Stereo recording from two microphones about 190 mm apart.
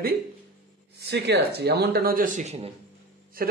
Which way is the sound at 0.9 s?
60° right (ahead or behind).